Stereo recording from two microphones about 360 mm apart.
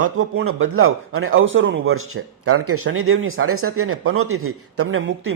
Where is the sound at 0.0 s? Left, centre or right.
Right.